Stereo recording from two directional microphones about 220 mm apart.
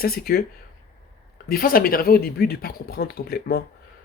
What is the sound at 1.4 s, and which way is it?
Speech, 40° left (ahead or behind).